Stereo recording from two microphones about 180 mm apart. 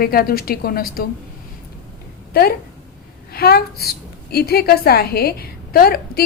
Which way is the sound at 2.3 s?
60° left (ahead or behind).